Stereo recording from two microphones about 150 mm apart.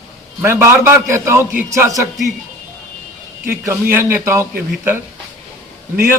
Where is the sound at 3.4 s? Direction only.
15° right (ahead or behind).